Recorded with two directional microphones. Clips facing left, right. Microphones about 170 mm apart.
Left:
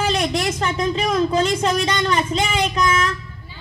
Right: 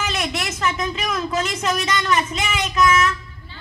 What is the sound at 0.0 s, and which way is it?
Speech, 30° left (ahead or behind).